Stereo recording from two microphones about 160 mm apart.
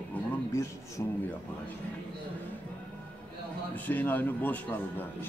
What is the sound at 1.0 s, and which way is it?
Speech, 20° left (ahead or behind).